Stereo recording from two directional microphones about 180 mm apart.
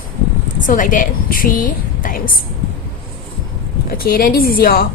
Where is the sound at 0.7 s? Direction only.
50° left (ahead or behind).